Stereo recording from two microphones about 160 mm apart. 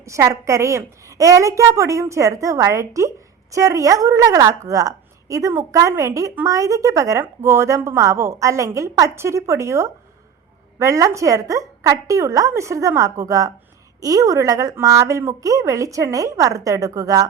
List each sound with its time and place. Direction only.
0.0 s a woman's voice: 20° right (ahead or behind)